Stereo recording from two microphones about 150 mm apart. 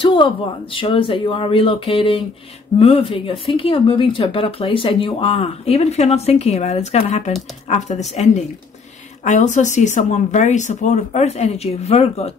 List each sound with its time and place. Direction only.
0.0 s speech: 30° left (ahead or behind)